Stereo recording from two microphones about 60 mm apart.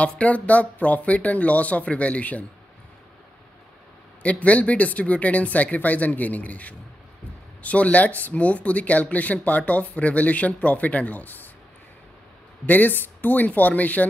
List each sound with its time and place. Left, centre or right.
0.0 s speech: left
4.2 s speech: left
12.6 s speech: left